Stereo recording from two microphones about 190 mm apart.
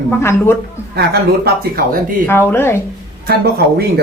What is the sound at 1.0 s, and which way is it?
Speech, 55° right (ahead or behind).